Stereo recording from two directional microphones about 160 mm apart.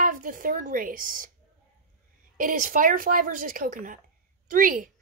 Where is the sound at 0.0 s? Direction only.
55° right (ahead or behind).